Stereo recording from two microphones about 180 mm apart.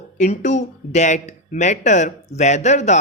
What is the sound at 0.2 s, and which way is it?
Speech, 40° left (ahead or behind).